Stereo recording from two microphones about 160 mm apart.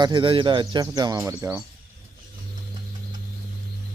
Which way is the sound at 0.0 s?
30° right (ahead or behind).